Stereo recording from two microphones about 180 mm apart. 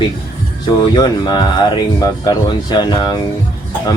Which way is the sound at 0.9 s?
25° left (ahead or behind).